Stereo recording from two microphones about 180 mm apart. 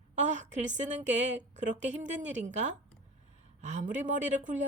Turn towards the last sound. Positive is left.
turn(degrees=-40)  # may be behind; listen again after turning